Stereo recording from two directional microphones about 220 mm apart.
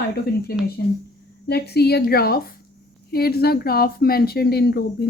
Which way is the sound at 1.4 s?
45° left (ahead or behind).